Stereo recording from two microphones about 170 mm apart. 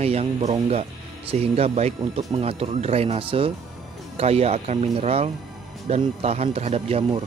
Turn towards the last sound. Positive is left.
turn(degrees=-35)  # may be behind; listen again after turning